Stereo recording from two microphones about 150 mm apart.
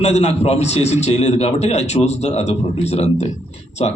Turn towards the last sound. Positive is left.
turn(degrees=45)  # may be behind; listen again after turning